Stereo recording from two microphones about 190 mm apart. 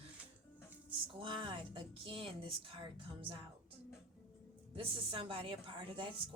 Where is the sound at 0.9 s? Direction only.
25° right (ahead or behind).